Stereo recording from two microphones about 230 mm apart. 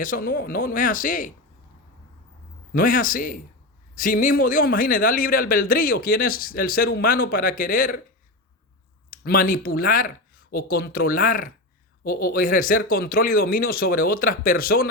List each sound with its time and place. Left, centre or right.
0.0 s a man's voice: left
2.7 s a man's voice: left
9.0 s a man's voice: left